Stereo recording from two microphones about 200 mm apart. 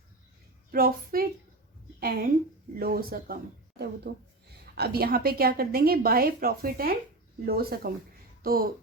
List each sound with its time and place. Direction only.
0.7 s a woman's voice: 45° right (ahead or behind)